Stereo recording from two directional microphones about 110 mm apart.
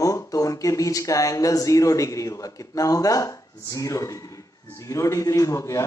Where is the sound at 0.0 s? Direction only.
30° left (ahead or behind).